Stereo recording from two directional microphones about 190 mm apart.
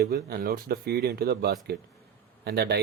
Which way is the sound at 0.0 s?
55° right (ahead or behind).